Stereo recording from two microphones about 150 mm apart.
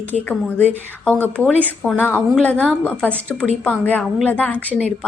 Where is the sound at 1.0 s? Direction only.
10° left (ahead or behind).